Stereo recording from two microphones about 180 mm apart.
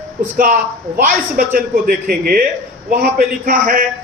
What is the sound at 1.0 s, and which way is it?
A man's voice, 50° right (ahead or behind).